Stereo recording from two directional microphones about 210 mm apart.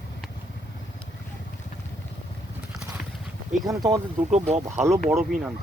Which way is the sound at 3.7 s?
15° right (ahead or behind).